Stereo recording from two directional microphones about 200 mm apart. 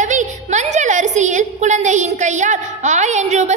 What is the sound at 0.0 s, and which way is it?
A woman's voice, 35° right (ahead or behind).